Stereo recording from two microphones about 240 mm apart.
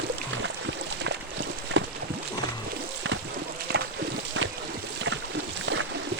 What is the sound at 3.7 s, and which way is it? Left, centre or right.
Horse, right.